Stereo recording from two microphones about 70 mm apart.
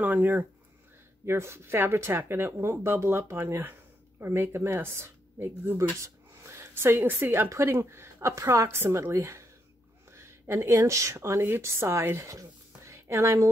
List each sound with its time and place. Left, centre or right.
0.0 s speech: right
1.2 s speech: right
6.0 s a sound: right
7.4 s speech: right